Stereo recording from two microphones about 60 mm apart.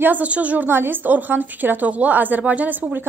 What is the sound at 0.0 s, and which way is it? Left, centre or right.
Speech, right.